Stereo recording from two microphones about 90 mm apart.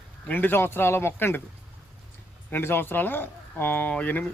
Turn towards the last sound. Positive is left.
turn(degrees=15)  # may be behind; listen again after turning